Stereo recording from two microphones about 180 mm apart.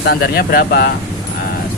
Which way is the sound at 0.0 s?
60° left (ahead or behind).